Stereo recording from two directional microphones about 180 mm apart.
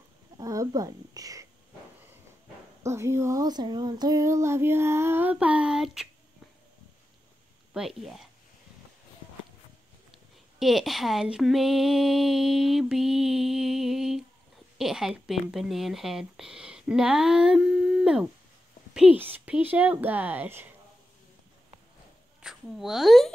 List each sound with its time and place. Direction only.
0.4 s speech: 20° right (ahead or behind)
2.8 s child singing: 15° right (ahead or behind)
7.7 s speech: centre (ahead or behind)
10.6 s speech: centre (ahead or behind)
18.9 s child singing: 5° right (ahead or behind)
22.4 s a woman's voice: centre (ahead or behind)